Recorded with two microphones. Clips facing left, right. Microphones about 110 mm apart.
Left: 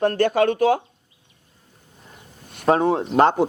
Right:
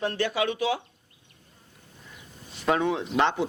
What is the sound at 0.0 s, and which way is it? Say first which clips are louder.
Speech: left 9 dB; 50° left (ahead or behind).